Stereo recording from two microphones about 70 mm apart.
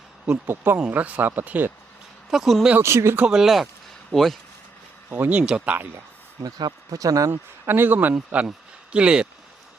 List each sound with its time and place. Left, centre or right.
0.4 s speech: right
2.3 s speech: centre
2.8 s speech: right
3.2 s speech: centre
5.0 s speech: right
6.4 s speech: right
7.0 s speech: right
7.3 s a man's voice: right; by 9.2 s centre